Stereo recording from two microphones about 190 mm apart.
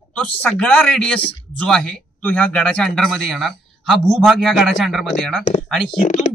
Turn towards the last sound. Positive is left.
turn(degrees=40)  # may be behind; listen again after turning